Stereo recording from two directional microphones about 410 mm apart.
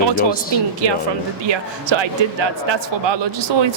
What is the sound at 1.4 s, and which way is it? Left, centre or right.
Speech, right.